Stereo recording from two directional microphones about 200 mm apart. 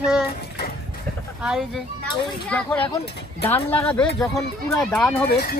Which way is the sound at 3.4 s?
10° left (ahead or behind).